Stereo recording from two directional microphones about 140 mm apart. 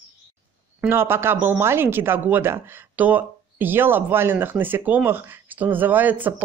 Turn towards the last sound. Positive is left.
turn(degrees=-15)  # may be behind; listen again after turning